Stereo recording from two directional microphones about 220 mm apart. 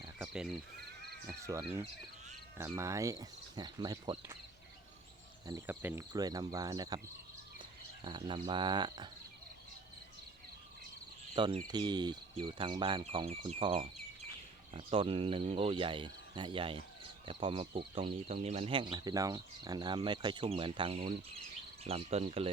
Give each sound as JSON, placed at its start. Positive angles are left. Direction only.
{"t": 0.2, "sound": "cricket", "side_deg": -5}
{"t": 1.3, "sound": "speech", "side_deg": -15}
{"t": 5.5, "sound": "speech", "side_deg": -10}
{"t": 8.0, "sound": "speech", "side_deg": -20}
{"t": 11.3, "sound": "speech", "side_deg": -20}